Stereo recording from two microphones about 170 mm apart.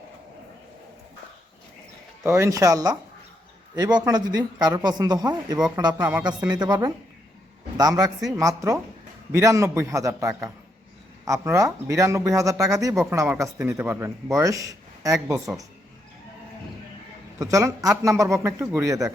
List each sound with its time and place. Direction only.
2.2 s speech: 15° right (ahead or behind)
8.0 s speech: 20° right (ahead or behind)
11.3 s a man's voice: 15° right (ahead or behind)
17.4 s a man's voice: 20° right (ahead or behind)